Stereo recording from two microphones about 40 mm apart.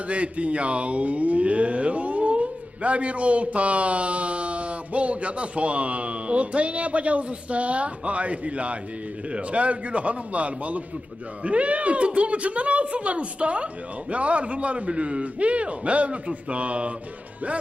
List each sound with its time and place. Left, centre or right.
0.1 s speech: right